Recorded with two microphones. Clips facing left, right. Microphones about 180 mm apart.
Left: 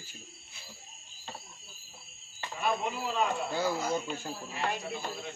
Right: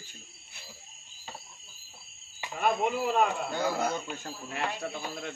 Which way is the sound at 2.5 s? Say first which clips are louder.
Right 4 dB; 60° right (ahead or behind).